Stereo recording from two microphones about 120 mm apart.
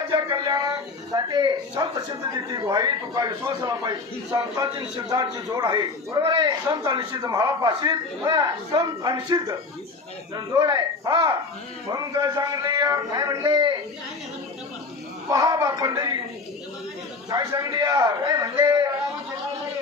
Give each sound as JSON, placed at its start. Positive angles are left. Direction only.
{"t": 0.1, "sound": "a sound", "side_deg": -35}
{"t": 1.1, "sound": "a man's voice", "side_deg": -35}
{"t": 15.3, "sound": "a man's voice", "side_deg": -30}
{"t": 17.2, "sound": "a man's voice", "side_deg": -30}